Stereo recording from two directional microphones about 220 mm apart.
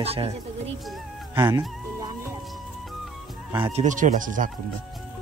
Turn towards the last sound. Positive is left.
turn(degrees=-35)  # may be behind; listen again after turning